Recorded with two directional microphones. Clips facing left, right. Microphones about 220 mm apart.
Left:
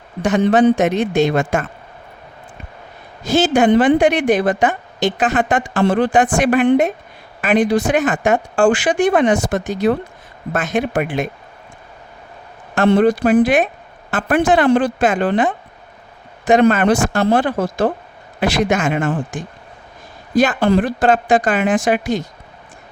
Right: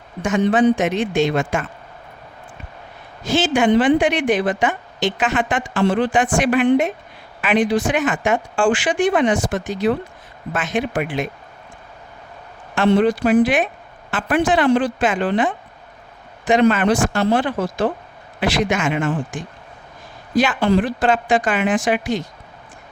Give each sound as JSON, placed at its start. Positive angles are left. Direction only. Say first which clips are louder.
{"t": 0.2, "sound": "a woman's voice", "louder": "left 3 dB", "side_deg": 35}
{"t": 3.3, "sound": "a woman's voice", "louder": "left 3 dB", "side_deg": 40}
{"t": 12.9, "sound": "a woman's voice", "louder": "left 2 dB", "side_deg": 50}